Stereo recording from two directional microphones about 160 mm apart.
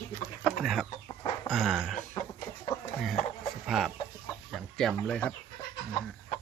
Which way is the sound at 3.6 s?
Centre (ahead or behind).